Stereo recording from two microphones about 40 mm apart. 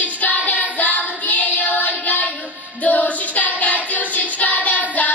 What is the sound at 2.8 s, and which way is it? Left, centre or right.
Singing, left.